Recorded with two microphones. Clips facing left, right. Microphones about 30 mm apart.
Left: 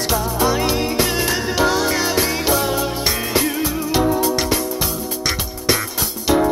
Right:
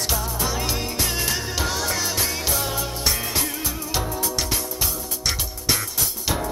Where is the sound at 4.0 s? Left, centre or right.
Left.